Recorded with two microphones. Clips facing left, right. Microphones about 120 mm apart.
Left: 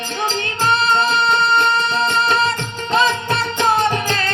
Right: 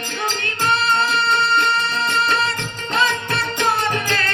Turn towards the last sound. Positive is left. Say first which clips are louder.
# left 3 dB
turn(degrees=20)  # may be behind; listen again after turning